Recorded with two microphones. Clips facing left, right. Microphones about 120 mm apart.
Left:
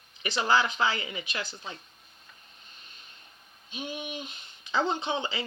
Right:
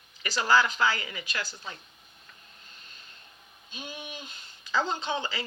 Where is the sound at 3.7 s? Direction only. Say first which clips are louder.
Left 5 dB; 20° left (ahead or behind).